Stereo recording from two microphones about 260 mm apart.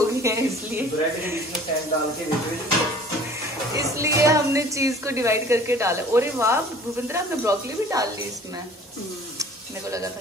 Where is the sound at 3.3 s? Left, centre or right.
Centre.